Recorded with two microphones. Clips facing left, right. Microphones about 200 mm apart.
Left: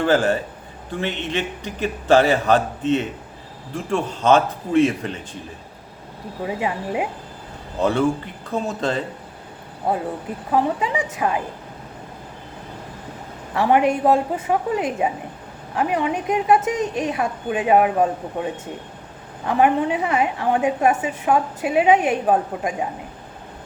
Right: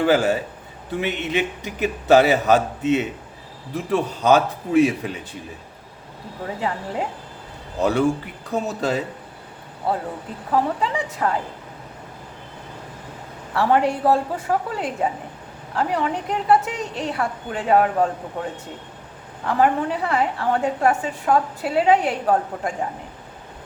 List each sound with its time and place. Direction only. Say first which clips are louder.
0.0 s a man's voice: even; 10° right (ahead or behind)
6.4 s a woman's voice: left 2 dB; 15° left (ahead or behind)
7.8 s a man's voice: even; 5° right (ahead or behind)
10.5 s a woman's voice: left 1 dB; 15° left (ahead or behind)
13.5 s a woman's voice: left 2 dB; 15° left (ahead or behind)
19.5 s a woman's voice: left 2 dB; 15° left (ahead or behind)